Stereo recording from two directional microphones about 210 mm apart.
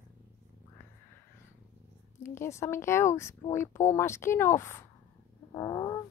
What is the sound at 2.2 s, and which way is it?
Speech, 15° left (ahead or behind).